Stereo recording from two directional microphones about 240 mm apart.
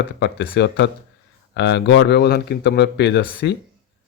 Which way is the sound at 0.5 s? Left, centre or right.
Left.